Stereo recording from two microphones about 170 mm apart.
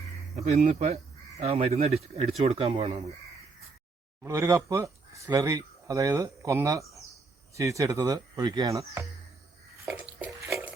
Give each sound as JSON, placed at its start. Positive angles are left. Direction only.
{"t": 0.3, "sound": "speech", "side_deg": -45}
{"t": 4.2, "sound": "speech", "side_deg": -15}
{"t": 9.8, "sound": "stir", "side_deg": -5}